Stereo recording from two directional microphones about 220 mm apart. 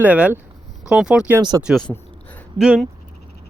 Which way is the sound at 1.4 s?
20° right (ahead or behind).